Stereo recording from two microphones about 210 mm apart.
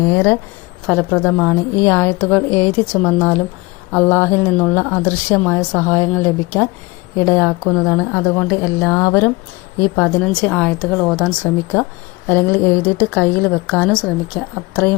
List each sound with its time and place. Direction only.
0.0 s a woman's voice: 15° left (ahead or behind)